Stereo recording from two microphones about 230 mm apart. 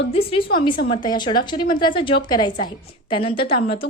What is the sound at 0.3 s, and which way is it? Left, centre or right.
A woman's voice, left.